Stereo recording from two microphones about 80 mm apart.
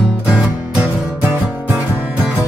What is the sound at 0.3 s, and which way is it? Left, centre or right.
Music, centre.